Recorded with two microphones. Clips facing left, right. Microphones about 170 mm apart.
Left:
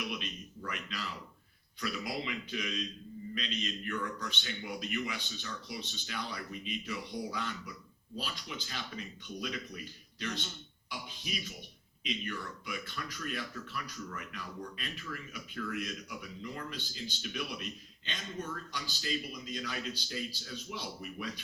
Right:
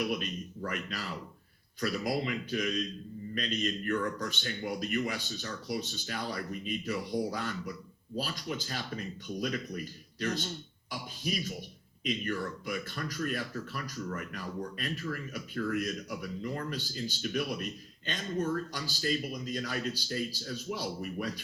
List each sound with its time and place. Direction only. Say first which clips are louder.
0.0 s speech: right 7 dB; 45° right (ahead or behind)